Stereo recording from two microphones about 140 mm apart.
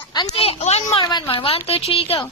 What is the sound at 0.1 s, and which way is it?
Speech, 30° left (ahead or behind).